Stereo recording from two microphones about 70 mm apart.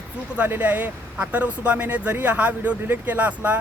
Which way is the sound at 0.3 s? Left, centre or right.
Right.